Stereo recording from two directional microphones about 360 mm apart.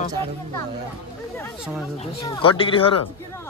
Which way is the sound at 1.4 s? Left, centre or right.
Centre.